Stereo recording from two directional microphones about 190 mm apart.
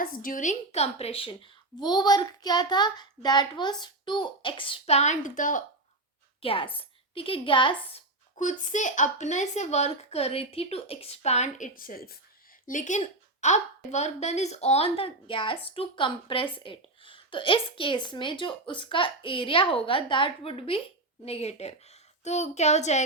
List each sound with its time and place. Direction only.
0.0 s a woman's voice: 45° left (ahead or behind)
6.4 s a woman's voice: 30° left (ahead or behind)
8.4 s a woman's voice: 40° left (ahead or behind)
12.6 s a woman's voice: 40° left (ahead or behind)